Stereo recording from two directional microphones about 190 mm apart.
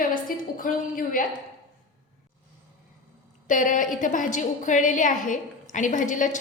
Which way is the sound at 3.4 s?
45° left (ahead or behind).